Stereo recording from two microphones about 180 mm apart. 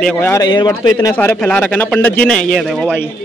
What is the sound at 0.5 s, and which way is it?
Speech, 25° left (ahead or behind).